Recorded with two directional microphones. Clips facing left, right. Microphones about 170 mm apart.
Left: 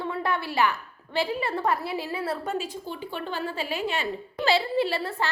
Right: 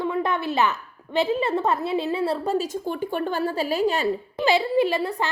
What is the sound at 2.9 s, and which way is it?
A woman's voice, 50° right (ahead or behind).